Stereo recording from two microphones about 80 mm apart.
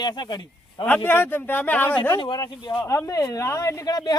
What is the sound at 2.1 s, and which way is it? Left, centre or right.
Speech, left.